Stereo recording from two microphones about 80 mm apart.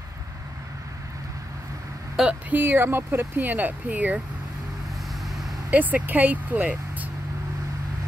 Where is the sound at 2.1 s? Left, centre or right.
Centre.